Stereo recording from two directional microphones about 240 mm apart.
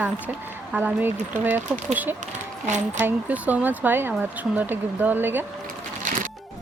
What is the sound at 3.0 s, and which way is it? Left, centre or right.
A woman's voice, centre.